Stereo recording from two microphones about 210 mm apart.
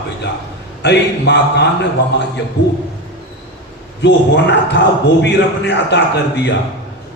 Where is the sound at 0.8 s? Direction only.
55° left (ahead or behind).